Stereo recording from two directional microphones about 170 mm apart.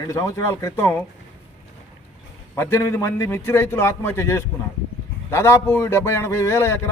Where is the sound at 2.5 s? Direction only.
15° left (ahead or behind).